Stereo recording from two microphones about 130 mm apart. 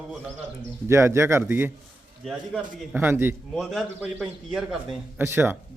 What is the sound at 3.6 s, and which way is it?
Speech, centre (ahead or behind).